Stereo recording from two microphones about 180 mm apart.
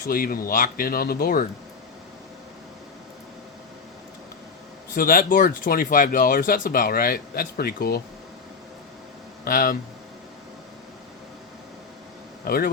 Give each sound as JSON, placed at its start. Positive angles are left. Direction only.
{"t": 0.1, "sound": "speech", "side_deg": 55}
{"t": 4.9, "sound": "speech", "side_deg": 50}
{"t": 9.4, "sound": "speech", "side_deg": 55}
{"t": 12.5, "sound": "speech", "side_deg": 55}